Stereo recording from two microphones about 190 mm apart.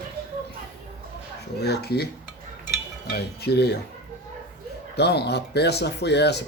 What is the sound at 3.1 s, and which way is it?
Speech, 55° left (ahead or behind).